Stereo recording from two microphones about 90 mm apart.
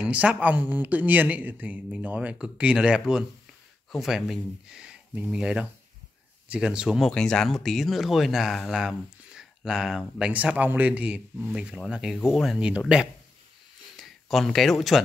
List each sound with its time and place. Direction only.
0.0 s speech: 15° right (ahead or behind)
7.0 s speech: 5° left (ahead or behind)
10.3 s speech: 15° right (ahead or behind); by 12.5 s centre (ahead or behind)
12.5 s speech: 10° right (ahead or behind)
13.9 s speech: centre (ahead or behind)